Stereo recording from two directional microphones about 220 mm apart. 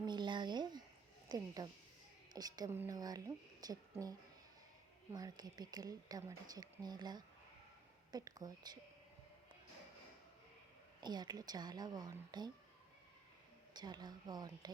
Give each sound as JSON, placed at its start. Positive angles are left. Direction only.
{"t": 0.0, "sound": "a sound", "side_deg": -20}
{"t": 1.3, "sound": "speech", "side_deg": -20}
{"t": 5.1, "sound": "speech", "side_deg": -20}
{"t": 11.0, "sound": "a woman's voice", "side_deg": -20}
{"t": 13.7, "sound": "a woman's voice", "side_deg": -20}